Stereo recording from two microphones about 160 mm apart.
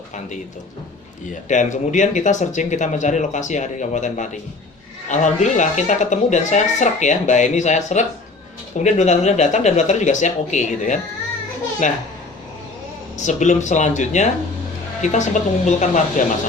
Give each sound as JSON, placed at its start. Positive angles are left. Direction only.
{"t": 1.5, "sound": "speech", "side_deg": 50}
{"t": 13.1, "sound": "speech", "side_deg": 50}